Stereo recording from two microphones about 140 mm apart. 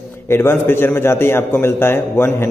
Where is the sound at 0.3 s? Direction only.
15° left (ahead or behind).